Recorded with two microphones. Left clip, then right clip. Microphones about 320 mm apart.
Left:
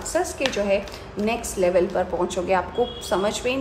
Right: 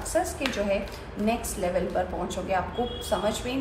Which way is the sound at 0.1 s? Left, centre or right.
Left.